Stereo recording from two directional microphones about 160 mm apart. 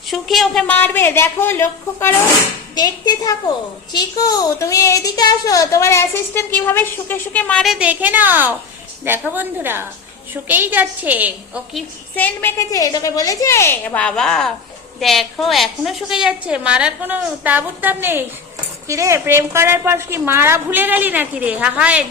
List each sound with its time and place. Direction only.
0.1 s a woman's voice: centre (ahead or behind)
2.7 s a woman's voice: 25° left (ahead or behind); by 11.8 s 10° right (ahead or behind)
12.1 s a woman's voice: 10° left (ahead or behind); by 22.0 s 10° right (ahead or behind)